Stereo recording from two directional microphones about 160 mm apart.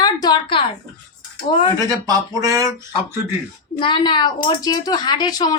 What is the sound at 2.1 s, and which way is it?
Speech, 20° right (ahead or behind).